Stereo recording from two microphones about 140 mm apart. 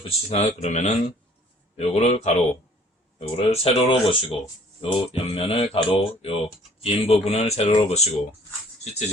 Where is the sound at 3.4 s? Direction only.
45° left (ahead or behind).